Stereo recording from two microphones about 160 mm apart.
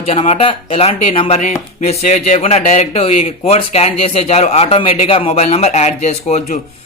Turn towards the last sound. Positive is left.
turn(degrees=45)  # may be behind; listen again after turning